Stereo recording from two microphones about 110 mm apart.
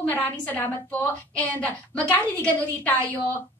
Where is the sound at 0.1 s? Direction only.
15° left (ahead or behind).